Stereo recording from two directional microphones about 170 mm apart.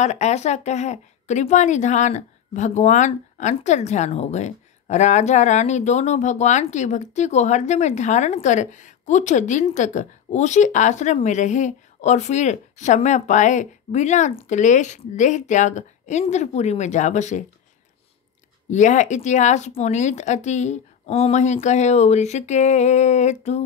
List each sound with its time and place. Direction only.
0.0 s a woman's voice: 40° left (ahead or behind)
18.7 s a woman's voice: 45° left (ahead or behind)